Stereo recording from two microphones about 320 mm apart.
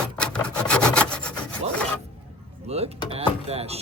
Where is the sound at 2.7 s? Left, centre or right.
Centre.